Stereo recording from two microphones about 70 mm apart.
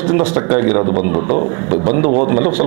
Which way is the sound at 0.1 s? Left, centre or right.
Right.